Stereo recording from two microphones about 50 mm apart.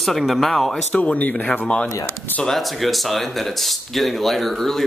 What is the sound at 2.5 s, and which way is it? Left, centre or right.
Speech, centre.